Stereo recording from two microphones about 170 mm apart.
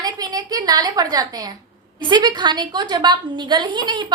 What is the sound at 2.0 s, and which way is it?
A woman's voice, 25° right (ahead or behind).